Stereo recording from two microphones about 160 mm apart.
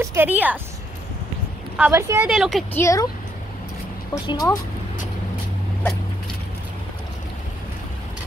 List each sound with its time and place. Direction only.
0.0 s a woman's voice: 15° right (ahead or behind)
1.8 s a woman's voice: 15° right (ahead or behind)
2.2 s a woman's voice: 5° right (ahead or behind)
2.7 s speech: 20° left (ahead or behind)
4.1 s speech: 20° left (ahead or behind)